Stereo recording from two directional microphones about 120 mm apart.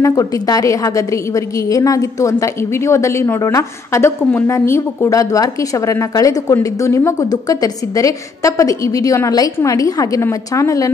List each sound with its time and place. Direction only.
0.0 s a woman's voice: 30° left (ahead or behind)